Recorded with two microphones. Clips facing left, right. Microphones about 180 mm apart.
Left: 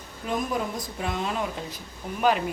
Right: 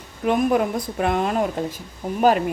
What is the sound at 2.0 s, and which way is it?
Speech, 40° right (ahead or behind).